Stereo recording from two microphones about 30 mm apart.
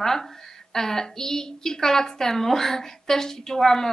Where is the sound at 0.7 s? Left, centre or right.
Centre.